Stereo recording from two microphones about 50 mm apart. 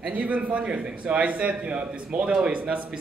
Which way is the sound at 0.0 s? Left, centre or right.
Right.